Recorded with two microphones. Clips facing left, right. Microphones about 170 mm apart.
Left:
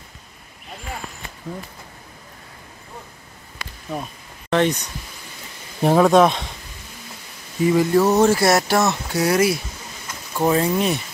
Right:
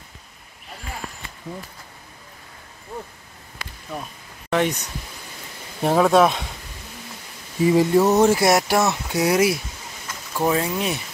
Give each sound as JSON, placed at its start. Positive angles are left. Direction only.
{"t": 4.5, "sound": "speech", "side_deg": -10}
{"t": 5.8, "sound": "speech", "side_deg": 0}
{"t": 7.7, "sound": "a sound", "side_deg": -25}
{"t": 8.1, "sound": "speech", "side_deg": -15}
{"t": 10.3, "sound": "speech", "side_deg": 0}